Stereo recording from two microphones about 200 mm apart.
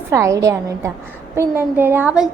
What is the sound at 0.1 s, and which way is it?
A woman's voice, 15° right (ahead or behind).